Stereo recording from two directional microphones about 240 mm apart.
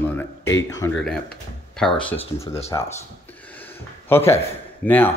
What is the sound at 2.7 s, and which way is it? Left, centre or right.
Speech, centre.